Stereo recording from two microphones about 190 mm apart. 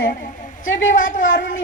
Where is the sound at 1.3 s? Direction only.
45° left (ahead or behind).